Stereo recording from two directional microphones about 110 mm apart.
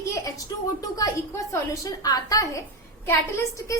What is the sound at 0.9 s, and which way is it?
A woman's voice, 30° left (ahead or behind).